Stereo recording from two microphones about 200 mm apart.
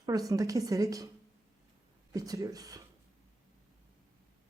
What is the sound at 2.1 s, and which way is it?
Speech, 20° right (ahead or behind).